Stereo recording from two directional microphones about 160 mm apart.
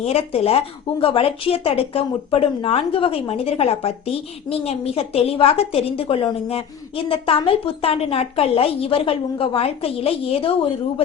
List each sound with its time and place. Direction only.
0.0 s a woman's voice: 40° left (ahead or behind)